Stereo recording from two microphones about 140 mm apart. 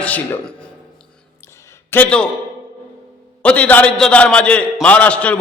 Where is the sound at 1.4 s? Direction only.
20° left (ahead or behind).